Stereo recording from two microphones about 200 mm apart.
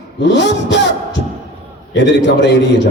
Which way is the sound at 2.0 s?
60° left (ahead or behind).